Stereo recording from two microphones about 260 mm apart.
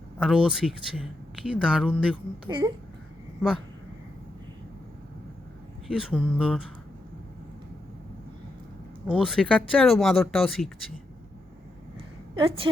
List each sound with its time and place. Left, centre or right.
0.2 s speech: centre
2.5 s speech: centre
5.9 s speech: centre
9.0 s speech: centre
12.4 s a woman's voice: centre